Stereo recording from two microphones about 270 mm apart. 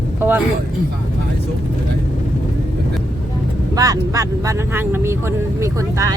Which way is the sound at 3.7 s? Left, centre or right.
Centre.